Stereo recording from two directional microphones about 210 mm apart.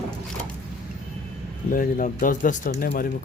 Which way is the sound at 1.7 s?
40° left (ahead or behind).